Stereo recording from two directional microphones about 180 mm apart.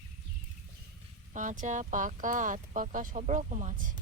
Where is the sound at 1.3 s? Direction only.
45° right (ahead or behind).